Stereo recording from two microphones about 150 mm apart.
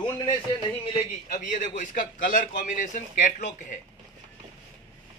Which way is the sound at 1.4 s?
60° left (ahead or behind).